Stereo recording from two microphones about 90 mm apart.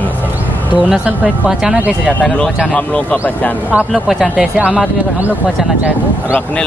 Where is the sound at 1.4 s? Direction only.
5° right (ahead or behind).